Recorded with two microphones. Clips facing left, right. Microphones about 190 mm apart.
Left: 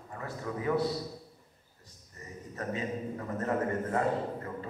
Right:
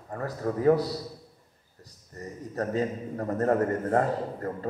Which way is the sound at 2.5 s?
40° right (ahead or behind).